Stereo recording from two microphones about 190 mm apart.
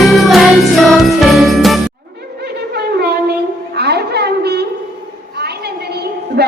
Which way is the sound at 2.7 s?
55° right (ahead or behind).